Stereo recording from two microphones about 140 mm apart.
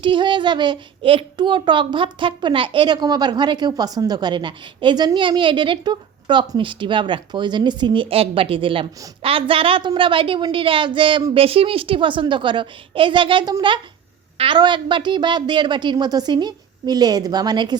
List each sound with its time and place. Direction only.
0.0 s a child's voice: 35° right (ahead or behind)